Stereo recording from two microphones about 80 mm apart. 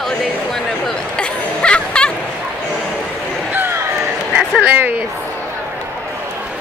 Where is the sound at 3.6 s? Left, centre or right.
Right.